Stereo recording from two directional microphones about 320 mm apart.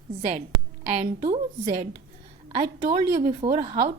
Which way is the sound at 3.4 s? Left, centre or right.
Centre.